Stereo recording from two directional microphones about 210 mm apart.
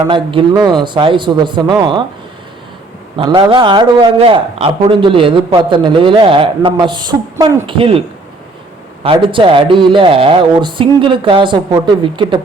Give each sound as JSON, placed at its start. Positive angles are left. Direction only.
{"t": 0.0, "sound": "speech", "side_deg": -25}
{"t": 3.2, "sound": "speech", "side_deg": -20}
{"t": 9.0, "sound": "speech", "side_deg": -25}